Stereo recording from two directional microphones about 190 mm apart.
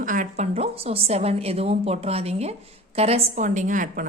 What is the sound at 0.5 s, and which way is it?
A woman's voice, 30° right (ahead or behind).